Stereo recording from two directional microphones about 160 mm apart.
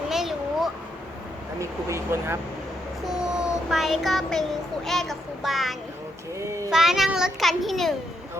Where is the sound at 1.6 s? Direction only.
20° right (ahead or behind).